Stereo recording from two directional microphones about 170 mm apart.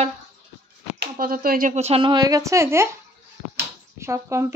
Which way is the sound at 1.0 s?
60° right (ahead or behind).